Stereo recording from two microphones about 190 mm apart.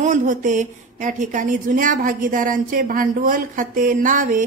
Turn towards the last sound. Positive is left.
turn(degrees=-45)  # may be behind; listen again after turning